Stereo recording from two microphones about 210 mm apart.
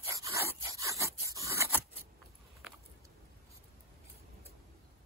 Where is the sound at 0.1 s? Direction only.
15° right (ahead or behind).